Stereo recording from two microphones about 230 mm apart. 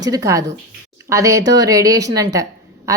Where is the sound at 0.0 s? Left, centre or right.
Centre.